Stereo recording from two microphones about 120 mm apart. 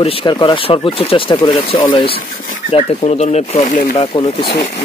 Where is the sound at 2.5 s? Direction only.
65° left (ahead or behind).